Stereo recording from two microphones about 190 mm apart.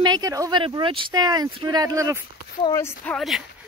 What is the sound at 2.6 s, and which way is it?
Speech, 15° left (ahead or behind).